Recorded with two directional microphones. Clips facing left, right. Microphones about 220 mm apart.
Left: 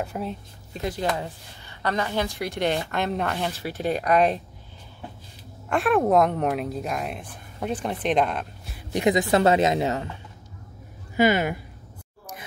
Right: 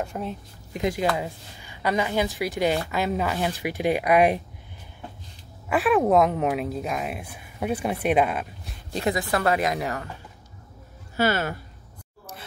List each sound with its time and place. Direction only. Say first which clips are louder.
0.0 s speech: even; 5° left (ahead or behind)
0.7 s a woman's voice: right 2 dB; 15° right (ahead or behind)
5.7 s speech: even; centre (ahead or behind)
8.9 s speech: left 5 dB; 20° left (ahead or behind)
11.1 s speech: left 3 dB; 15° left (ahead or behind)